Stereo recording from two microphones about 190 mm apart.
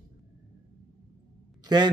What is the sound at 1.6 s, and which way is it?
Speech, 25° right (ahead or behind).